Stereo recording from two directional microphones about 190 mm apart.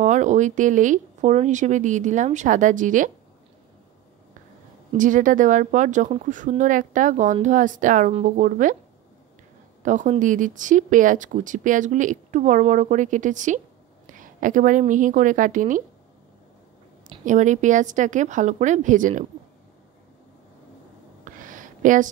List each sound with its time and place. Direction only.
0.0 s speech: 40° right (ahead or behind)
4.9 s speech: 45° right (ahead or behind)
9.8 s a woman's voice: 40° right (ahead or behind)
17.2 s speech: 40° right (ahead or behind)
21.2 s a sound: 45° right (ahead or behind)